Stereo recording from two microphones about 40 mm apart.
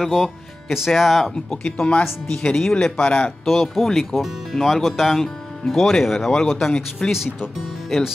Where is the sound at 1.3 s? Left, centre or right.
Left.